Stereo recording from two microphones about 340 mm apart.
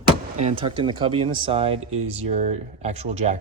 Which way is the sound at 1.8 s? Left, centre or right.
Right.